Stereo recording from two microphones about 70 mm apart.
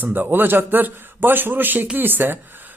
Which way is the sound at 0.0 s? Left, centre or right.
Right.